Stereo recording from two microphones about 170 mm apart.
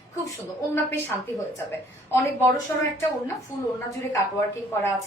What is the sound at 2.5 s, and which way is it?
A woman's voice, 15° left (ahead or behind).